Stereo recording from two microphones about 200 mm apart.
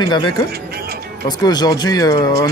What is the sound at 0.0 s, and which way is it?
Speech, 20° left (ahead or behind).